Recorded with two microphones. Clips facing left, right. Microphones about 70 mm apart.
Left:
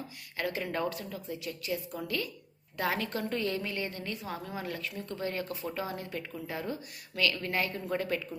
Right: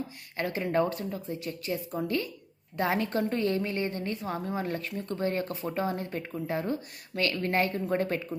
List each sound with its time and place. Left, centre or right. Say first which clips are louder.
0.3 s a woman's voice: right 5 dB; right